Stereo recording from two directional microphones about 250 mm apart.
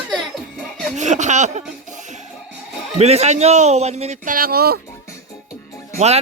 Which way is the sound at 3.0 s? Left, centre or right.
Right.